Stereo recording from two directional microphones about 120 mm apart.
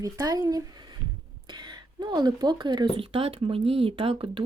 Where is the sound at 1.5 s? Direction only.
40° right (ahead or behind).